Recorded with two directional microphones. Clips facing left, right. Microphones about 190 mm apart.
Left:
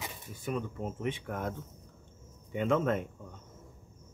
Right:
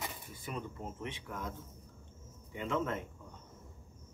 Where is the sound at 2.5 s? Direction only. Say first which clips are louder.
Left 7 dB; 55° left (ahead or behind).